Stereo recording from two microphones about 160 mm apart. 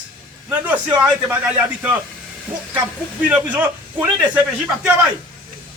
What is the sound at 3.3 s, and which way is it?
A man's voice, 10° right (ahead or behind).